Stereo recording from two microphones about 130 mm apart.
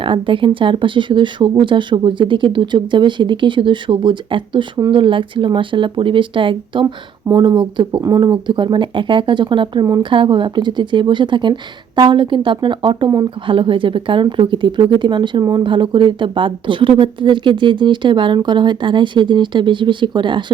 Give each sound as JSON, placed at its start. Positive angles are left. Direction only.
{"t": 0.0, "sound": "a woman's voice", "side_deg": -40}